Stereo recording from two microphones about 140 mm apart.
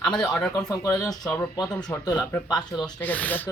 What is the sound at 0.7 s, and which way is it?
Speech, 20° left (ahead or behind).